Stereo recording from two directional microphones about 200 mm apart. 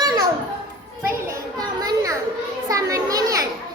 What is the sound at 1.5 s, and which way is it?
Children playing, 20° right (ahead or behind).